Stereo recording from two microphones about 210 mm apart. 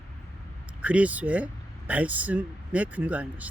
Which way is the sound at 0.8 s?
5° right (ahead or behind).